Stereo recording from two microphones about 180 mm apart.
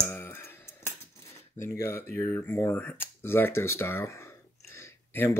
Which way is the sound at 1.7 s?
15° left (ahead or behind).